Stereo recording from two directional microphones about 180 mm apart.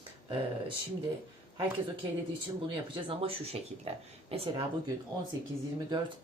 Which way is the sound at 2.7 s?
30° right (ahead or behind).